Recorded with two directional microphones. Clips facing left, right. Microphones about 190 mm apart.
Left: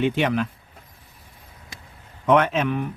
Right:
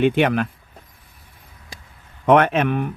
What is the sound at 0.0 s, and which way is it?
Speech, 60° right (ahead or behind).